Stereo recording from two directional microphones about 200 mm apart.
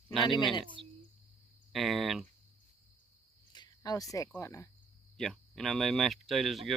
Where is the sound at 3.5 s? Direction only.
20° left (ahead or behind).